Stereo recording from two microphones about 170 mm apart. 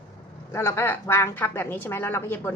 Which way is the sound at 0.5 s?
15° left (ahead or behind).